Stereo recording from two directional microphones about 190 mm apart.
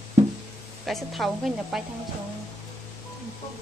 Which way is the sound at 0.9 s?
Centre (ahead or behind).